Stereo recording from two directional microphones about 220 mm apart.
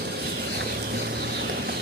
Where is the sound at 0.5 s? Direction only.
45° right (ahead or behind).